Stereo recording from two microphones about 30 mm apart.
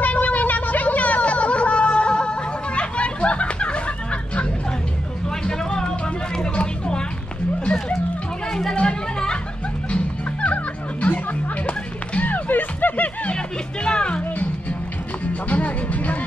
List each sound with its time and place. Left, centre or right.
0.0 s a sound: left
5.4 s music: left
8.5 s chatter: centre
8.8 s chatter: left
9.8 s music: left
12.3 s music: left
13.8 s music: left
15.5 s music: left